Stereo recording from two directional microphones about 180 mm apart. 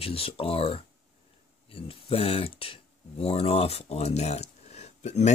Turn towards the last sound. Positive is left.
turn(degrees=40)  # may be behind; listen again after turning